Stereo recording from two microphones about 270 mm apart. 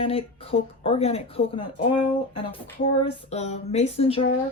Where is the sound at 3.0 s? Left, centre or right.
Left.